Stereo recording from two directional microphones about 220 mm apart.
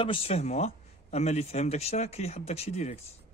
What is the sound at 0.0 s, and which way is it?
Speech, 25° left (ahead or behind).